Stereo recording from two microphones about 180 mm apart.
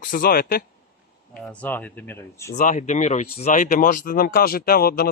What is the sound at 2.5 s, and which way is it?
Speech, 45° left (ahead or behind).